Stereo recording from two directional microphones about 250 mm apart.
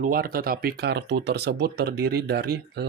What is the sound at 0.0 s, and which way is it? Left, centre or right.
Speech, right.